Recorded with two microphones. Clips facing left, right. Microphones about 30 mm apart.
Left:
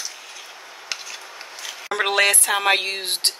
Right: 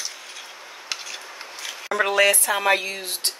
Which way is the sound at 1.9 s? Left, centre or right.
Left.